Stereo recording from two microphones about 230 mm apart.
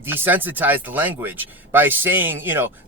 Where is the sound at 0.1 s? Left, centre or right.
Centre.